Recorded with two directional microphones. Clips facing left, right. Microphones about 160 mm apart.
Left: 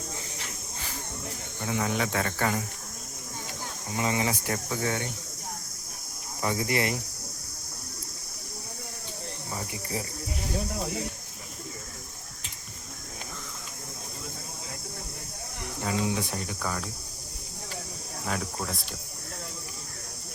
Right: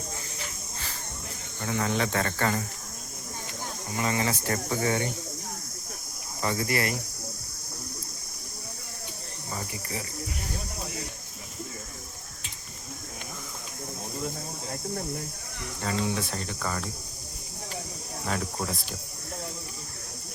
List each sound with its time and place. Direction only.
1.6 s speech: 10° left (ahead or behind)
3.9 s speech: 15° left (ahead or behind)
4.7 s speech: centre (ahead or behind)
6.4 s cricket: 10° left (ahead or behind)
15.8 s speech: 10° left (ahead or behind)
18.3 s speech: centre (ahead or behind)